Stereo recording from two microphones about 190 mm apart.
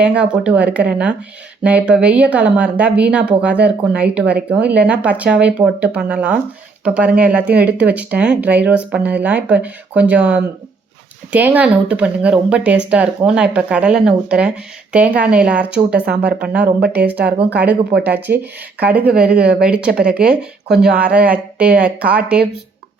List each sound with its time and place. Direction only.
0.0 s speech: 5° right (ahead or behind)
16.4 s speech: 50° right (ahead or behind)
16.9 s speech: 10° right (ahead or behind)